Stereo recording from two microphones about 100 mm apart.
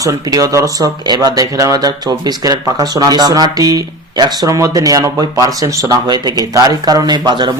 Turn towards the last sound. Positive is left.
turn(degrees=-45)  # may be behind; listen again after turning